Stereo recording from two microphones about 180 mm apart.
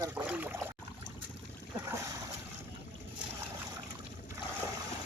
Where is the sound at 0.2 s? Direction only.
10° right (ahead or behind).